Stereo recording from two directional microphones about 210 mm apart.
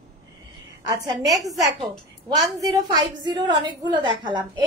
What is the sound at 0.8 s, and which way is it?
Speech, 15° right (ahead or behind).